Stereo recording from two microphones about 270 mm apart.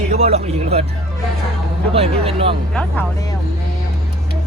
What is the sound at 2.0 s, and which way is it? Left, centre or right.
Speech, right.